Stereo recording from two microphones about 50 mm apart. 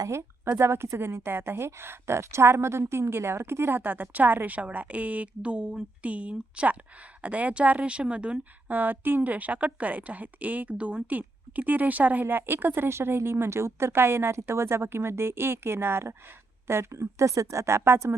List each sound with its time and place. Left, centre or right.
0.1 s a woman's voice: right
8.7 s a woman's voice: right
12.2 s speech: right